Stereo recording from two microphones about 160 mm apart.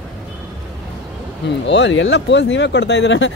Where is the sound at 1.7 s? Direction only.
90° left.